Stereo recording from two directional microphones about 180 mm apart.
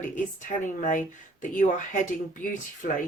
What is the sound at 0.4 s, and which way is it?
Speech, 45° left (ahead or behind).